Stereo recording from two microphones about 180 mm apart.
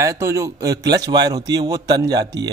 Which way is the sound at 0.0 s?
15° right (ahead or behind).